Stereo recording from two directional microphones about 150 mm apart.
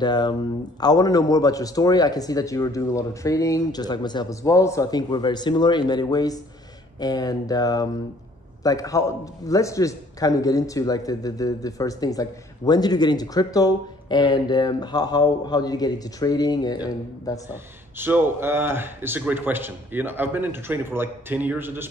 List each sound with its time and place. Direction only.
0.0 s speech: 30° left (ahead or behind)
17.5 s speech: 15° right (ahead or behind)